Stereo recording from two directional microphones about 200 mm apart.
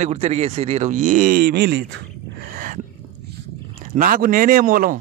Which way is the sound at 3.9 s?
45° right (ahead or behind).